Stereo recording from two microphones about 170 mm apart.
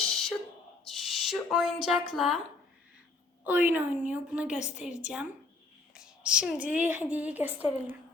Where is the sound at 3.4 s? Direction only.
10° right (ahead or behind).